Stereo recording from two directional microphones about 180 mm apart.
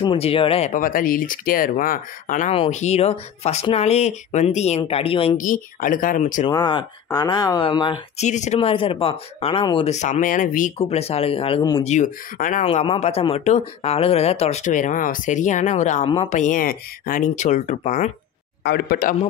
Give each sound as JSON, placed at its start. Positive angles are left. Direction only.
{"t": 0.0, "sound": "speech", "side_deg": 30}
{"t": 2.5, "sound": "speech", "side_deg": 35}
{"t": 5.4, "sound": "speech", "side_deg": 50}
{"t": 6.4, "sound": "speech", "side_deg": 25}
{"t": 8.2, "sound": "speech", "side_deg": 40}
{"t": 10.8, "sound": "speech", "side_deg": 35}
{"t": 11.8, "sound": "speech", "side_deg": 40}
{"t": 12.6, "sound": "speech", "side_deg": 30}
{"t": 18.6, "sound": "speech", "side_deg": 60}